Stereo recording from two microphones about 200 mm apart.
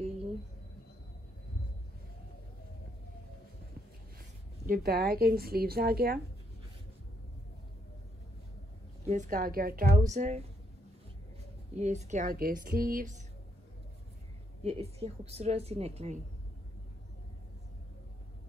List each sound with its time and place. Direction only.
4.6 s speech: 50° right (ahead or behind)
9.0 s speech: 35° right (ahead or behind)
11.8 s speech: 35° right (ahead or behind)
14.6 s a woman's voice: 30° right (ahead or behind)